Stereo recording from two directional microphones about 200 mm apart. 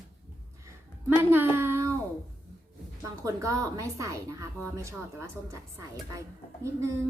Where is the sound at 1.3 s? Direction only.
10° right (ahead or behind).